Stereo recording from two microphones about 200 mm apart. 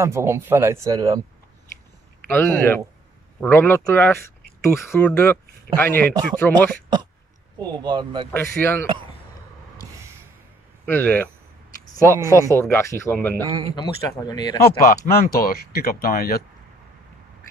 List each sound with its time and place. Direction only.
0.0 s speech: 15° right (ahead or behind)
2.2 s speech: 10° left (ahead or behind)
7.5 s speech: 20° right (ahead or behind)
8.3 s speech: 10° left (ahead or behind)
10.9 s speech: 10° left (ahead or behind)
12.3 s speech: 15° left (ahead or behind)
13.7 s speech: 20° left (ahead or behind)
14.6 s speech: 50° left (ahead or behind)